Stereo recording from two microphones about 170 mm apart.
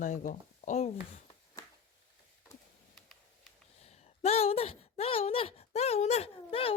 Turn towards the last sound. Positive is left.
turn(degrees=35)  # may be behind; listen again after turning